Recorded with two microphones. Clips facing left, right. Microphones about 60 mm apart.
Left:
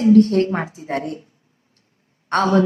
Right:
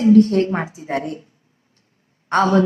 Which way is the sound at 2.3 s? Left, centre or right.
Centre.